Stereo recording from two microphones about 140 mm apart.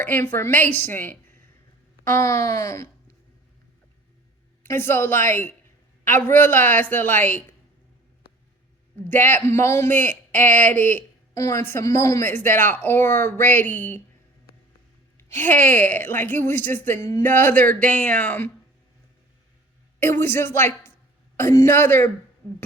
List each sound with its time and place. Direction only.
0.0 s speech: 15° left (ahead or behind)
2.0 s wail: 20° left (ahead or behind)
4.6 s speech: 15° left (ahead or behind)
9.0 s speech: 15° left (ahead or behind)
15.2 s speech: 15° left (ahead or behind)
20.0 s speech: 15° left (ahead or behind)